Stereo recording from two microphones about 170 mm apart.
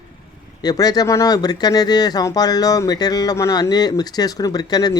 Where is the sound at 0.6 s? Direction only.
20° left (ahead or behind).